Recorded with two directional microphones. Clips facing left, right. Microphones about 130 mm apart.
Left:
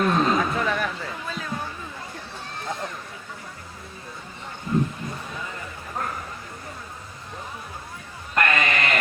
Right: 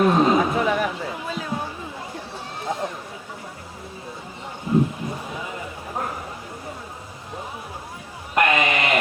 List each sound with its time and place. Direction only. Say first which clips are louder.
0.0 s chatter: right 4 dB; 15° right (ahead or behind)
4.7 s a sound: right 4 dB; 15° right (ahead or behind)
8.4 s sheep: right 3 dB; 15° right (ahead or behind)